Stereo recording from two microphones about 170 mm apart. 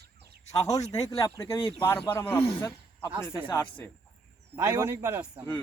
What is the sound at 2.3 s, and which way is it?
Speech, 30° left (ahead or behind).